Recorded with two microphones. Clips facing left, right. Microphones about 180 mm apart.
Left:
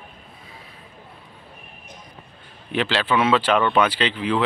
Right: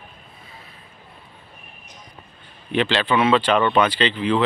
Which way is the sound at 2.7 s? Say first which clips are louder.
Right 2 dB; 5° left (ahead or behind).